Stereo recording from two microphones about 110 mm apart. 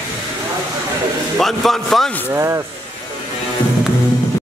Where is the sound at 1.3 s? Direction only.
5° left (ahead or behind).